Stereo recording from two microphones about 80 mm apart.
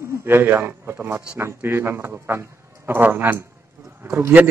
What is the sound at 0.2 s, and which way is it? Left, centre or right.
A man's voice, right.